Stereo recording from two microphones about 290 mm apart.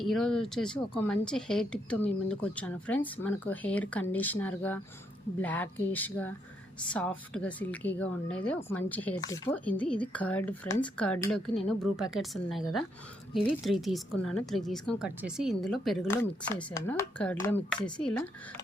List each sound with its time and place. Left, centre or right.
0.0 s speech: centre